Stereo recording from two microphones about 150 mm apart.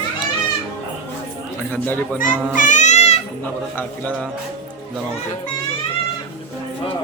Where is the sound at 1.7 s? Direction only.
10° left (ahead or behind).